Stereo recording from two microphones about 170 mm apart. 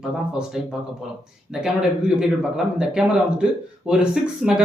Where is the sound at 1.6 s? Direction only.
5° right (ahead or behind).